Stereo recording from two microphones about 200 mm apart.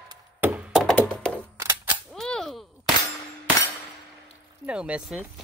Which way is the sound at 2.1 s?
Centre (ahead or behind).